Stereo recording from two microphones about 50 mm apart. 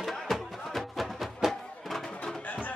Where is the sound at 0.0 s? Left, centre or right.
Centre.